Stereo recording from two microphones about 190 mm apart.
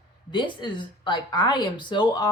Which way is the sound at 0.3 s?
25° left (ahead or behind).